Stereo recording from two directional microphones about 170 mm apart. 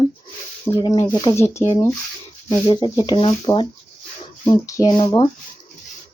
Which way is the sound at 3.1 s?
30° left (ahead or behind).